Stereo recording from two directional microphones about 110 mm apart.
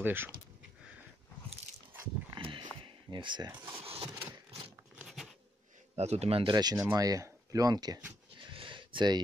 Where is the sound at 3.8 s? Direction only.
60° right (ahead or behind).